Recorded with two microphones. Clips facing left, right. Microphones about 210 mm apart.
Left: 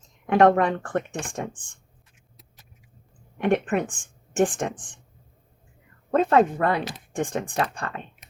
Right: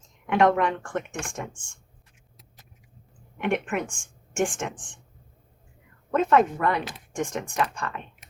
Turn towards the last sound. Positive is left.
turn(degrees=35)  # may be behind; listen again after turning